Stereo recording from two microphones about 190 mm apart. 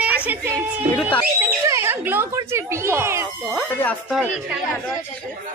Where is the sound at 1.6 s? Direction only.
15° right (ahead or behind).